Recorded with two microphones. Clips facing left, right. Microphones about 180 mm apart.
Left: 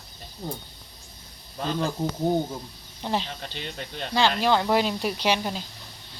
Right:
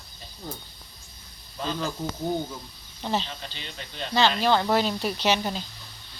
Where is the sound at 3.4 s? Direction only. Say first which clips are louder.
Left 4 dB; 50° left (ahead or behind).